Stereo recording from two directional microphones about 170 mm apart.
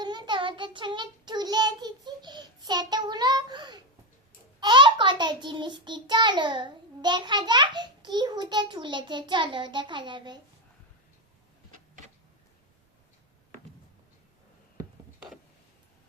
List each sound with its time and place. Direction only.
0.0 s child singing: 25° right (ahead or behind)